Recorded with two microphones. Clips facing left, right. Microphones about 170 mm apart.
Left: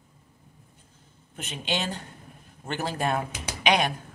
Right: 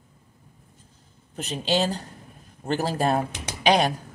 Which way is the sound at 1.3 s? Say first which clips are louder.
Right 6 dB; 35° right (ahead or behind).